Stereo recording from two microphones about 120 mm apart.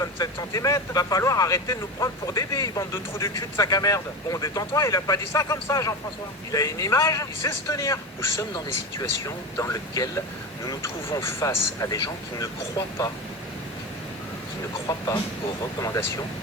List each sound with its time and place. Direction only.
0.0 s speech: 30° left (ahead or behind)
14.8 s speech: 30° left (ahead or behind)